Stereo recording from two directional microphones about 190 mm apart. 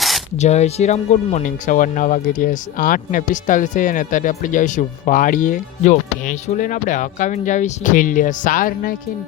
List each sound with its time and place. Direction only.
0.3 s speech: 35° left (ahead or behind)